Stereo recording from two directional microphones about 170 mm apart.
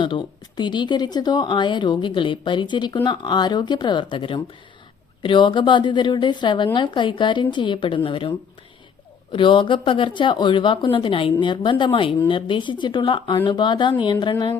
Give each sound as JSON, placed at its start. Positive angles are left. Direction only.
{"t": 0.0, "sound": "speech", "side_deg": 30}
{"t": 9.3, "sound": "speech", "side_deg": 30}